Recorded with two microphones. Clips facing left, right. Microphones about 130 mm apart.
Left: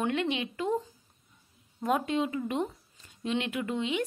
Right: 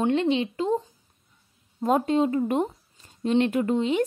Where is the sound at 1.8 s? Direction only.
35° right (ahead or behind).